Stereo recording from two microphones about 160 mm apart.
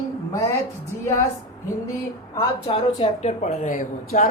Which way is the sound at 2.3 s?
30° left (ahead or behind).